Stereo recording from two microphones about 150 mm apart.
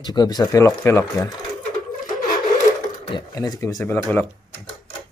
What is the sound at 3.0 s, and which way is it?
Speech, 30° left (ahead or behind).